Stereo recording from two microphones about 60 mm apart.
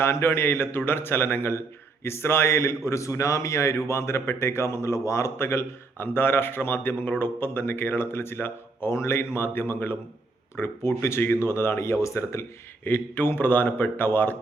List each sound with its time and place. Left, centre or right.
0.0 s a man's voice: left